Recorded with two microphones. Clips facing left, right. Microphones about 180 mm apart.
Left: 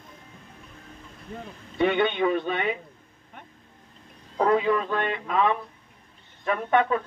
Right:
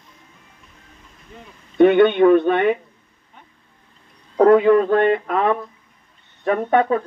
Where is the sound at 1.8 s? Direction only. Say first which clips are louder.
Right 10 dB; 55° right (ahead or behind).